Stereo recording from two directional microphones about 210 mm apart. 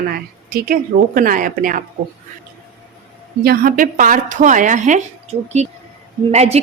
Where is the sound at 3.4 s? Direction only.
45° right (ahead or behind).